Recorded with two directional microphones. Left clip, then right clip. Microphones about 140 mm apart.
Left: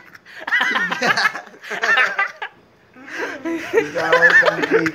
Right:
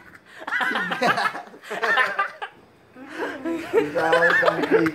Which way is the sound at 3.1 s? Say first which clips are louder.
Left 3 dB; 20° left (ahead or behind).